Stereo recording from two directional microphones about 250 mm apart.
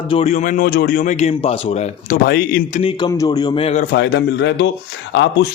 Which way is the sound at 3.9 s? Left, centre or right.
Left.